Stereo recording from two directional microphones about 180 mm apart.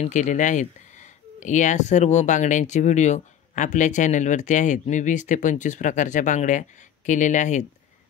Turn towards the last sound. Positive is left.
turn(degrees=40)  # may be behind; listen again after turning